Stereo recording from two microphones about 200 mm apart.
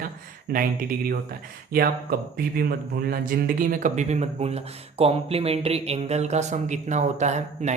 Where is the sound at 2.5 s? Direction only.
50° right (ahead or behind).